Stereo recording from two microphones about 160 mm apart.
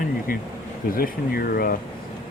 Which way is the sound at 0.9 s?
65° left (ahead or behind).